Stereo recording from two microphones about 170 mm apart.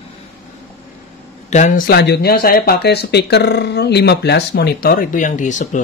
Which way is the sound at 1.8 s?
75° left (ahead or behind).